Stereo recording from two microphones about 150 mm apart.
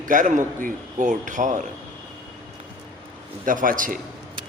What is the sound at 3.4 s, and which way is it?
Speech, 65° right (ahead or behind).